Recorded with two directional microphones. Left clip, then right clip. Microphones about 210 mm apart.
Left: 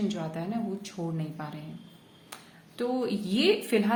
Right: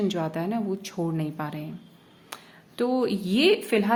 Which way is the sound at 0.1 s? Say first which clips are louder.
Right 6 dB; 30° right (ahead or behind).